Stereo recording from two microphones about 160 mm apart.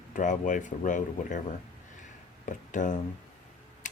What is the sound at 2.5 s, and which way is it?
Speech, 50° left (ahead or behind).